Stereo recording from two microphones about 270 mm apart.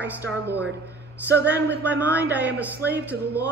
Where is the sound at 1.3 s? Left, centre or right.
Right.